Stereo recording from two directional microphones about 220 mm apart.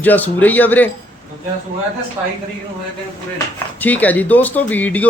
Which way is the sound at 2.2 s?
20° right (ahead or behind).